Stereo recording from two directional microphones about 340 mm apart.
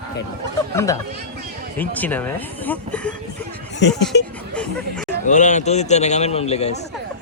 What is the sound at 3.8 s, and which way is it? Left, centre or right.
Speech, left.